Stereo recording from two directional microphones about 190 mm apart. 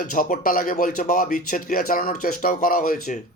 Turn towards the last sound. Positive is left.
turn(degrees=45)  # may be behind; listen again after turning